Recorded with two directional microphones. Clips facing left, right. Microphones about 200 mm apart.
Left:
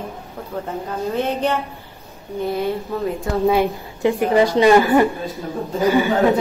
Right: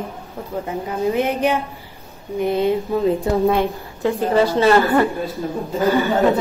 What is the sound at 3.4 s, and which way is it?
A woman's voice, 10° left (ahead or behind).